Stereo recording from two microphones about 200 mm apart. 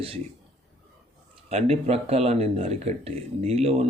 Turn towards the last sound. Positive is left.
turn(degrees=-30)  # may be behind; listen again after turning